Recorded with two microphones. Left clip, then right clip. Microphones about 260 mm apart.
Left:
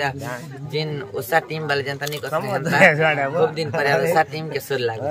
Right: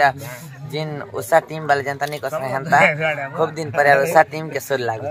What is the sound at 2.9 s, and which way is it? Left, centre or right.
Speech, left.